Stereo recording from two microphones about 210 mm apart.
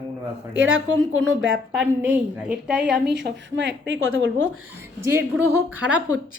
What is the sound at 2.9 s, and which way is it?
Speech, 55° right (ahead or behind).